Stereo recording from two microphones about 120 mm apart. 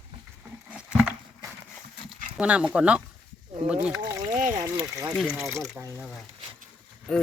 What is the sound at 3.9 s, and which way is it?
Speech, 30° right (ahead or behind).